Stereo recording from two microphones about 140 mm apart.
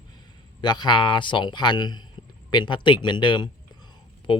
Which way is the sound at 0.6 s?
30° left (ahead or behind).